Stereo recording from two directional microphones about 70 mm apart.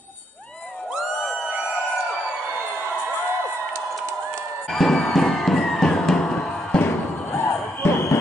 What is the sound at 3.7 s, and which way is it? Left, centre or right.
Crowd, right.